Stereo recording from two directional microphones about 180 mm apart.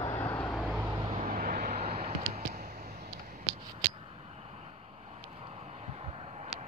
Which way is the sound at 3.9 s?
35° right (ahead or behind).